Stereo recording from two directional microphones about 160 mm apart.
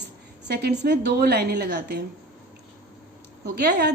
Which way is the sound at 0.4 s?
90° right.